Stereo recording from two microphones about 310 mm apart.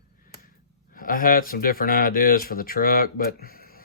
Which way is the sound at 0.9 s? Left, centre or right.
Left.